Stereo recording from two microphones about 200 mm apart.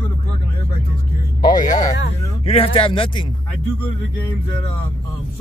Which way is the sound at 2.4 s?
30° left (ahead or behind).